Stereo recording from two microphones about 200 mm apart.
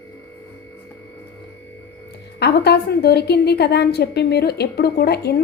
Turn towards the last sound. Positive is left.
turn(degrees=55)  # may be behind; listen again after turning